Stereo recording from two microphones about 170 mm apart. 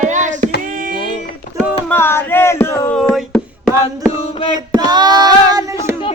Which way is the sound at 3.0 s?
Centre (ahead or behind).